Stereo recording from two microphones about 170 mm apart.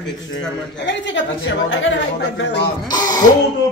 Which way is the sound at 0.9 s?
90° left.